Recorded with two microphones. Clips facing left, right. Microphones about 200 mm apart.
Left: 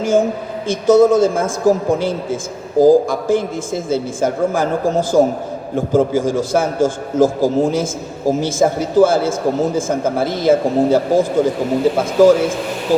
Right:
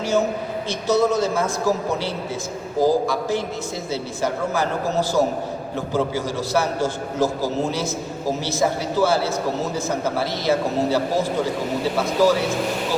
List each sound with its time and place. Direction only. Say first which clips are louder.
0.0 s a woman's voice: left 5 dB; 50° left (ahead or behind)